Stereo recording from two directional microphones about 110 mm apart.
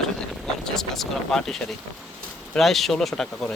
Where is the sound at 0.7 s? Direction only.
Centre (ahead or behind).